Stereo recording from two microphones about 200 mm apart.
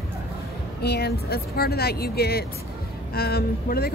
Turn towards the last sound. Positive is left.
turn(degrees=50)  # may be behind; listen again after turning